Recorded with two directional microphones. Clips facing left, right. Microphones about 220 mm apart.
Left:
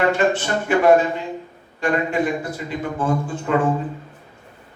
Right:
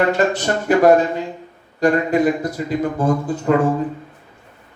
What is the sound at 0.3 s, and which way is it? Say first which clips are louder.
Speech: right 4 dB; 40° right (ahead or behind).